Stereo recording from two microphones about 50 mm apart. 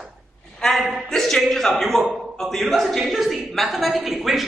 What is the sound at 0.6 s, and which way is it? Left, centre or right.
A man's voice, centre.